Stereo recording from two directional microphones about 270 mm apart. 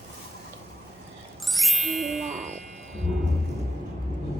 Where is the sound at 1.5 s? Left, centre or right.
Centre.